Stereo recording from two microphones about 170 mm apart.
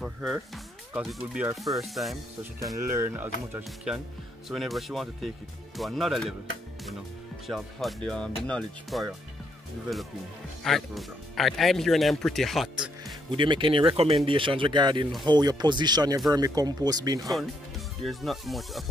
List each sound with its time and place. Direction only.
0.0 s speech: centre (ahead or behind)
2.7 s speech: 15° right (ahead or behind); by 6.3 s centre (ahead or behind)
7.4 s speech: centre (ahead or behind)
13.3 s speech: 30° right (ahead or behind)
18.0 s speech: centre (ahead or behind)